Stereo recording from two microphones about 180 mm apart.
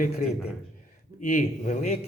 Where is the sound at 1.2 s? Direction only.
45° left (ahead or behind).